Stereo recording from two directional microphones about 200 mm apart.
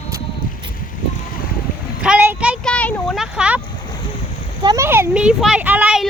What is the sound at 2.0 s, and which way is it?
Speech, 10° right (ahead or behind).